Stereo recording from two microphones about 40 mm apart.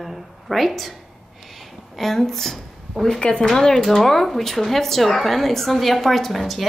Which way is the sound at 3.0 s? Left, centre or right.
Left.